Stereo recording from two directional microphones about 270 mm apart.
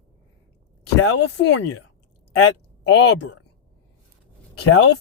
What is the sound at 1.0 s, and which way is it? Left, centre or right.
Speech, left.